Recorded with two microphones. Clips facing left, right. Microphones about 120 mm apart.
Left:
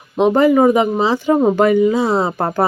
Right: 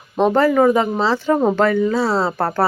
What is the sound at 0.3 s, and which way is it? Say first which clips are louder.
Speech: left 2 dB; 15° left (ahead or behind).